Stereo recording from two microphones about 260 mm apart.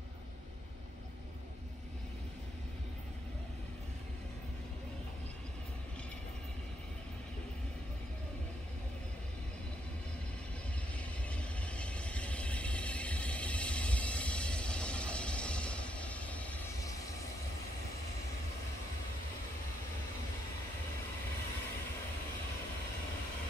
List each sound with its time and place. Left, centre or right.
11.2 s vehicle: centre